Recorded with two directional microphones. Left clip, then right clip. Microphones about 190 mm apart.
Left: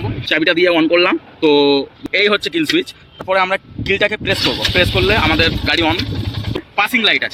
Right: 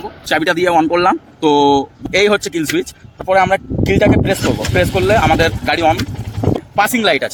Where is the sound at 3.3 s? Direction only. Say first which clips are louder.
Right 3 dB; 60° right (ahead or behind).